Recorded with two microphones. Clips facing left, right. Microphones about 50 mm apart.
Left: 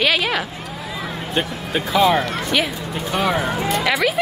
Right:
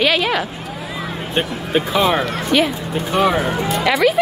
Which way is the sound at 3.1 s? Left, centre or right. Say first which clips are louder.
Right 4 dB; centre.